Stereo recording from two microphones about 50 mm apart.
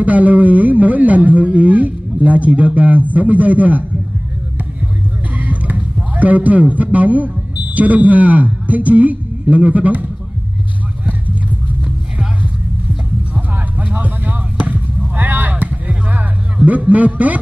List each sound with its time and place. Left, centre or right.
0.0 s speech: right
5.4 s a man's voice: right
13.3 s basketball bounce: right
15.6 s a sound: right
16.9 s speech: right